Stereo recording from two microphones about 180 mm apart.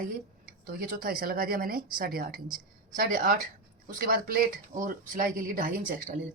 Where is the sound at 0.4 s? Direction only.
55° right (ahead or behind).